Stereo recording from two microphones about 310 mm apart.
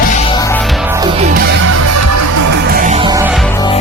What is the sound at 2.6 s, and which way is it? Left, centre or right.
Music, right.